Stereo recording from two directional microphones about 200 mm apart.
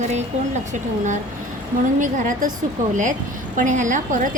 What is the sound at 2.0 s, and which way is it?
Speech, 40° right (ahead or behind).